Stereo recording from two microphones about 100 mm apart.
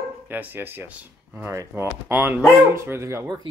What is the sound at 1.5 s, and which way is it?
Speech, 25° right (ahead or behind).